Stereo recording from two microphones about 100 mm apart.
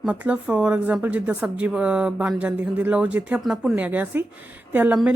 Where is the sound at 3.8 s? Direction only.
15° right (ahead or behind).